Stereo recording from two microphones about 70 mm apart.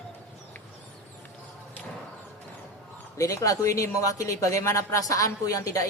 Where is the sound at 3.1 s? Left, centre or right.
Left.